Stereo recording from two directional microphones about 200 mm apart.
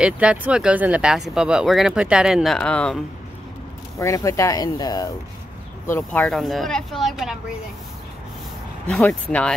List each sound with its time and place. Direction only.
0.0 s speech: 5° right (ahead or behind)
4.0 s speech: 15° left (ahead or behind); by 7.3 s centre (ahead or behind)
8.8 s speech: 5° left (ahead or behind)